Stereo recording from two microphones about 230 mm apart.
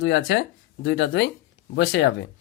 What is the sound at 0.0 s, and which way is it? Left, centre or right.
Speech, left.